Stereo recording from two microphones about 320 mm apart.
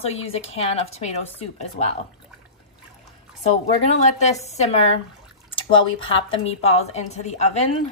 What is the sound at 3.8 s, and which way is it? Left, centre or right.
A woman's voice, left.